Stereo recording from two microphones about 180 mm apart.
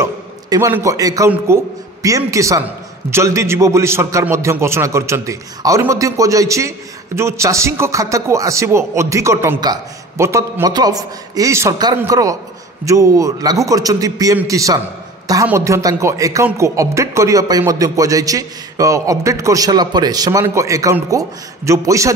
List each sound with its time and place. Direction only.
0.0 s a man's voice: 15° right (ahead or behind)